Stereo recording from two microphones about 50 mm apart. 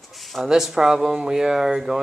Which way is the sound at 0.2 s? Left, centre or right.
Centre.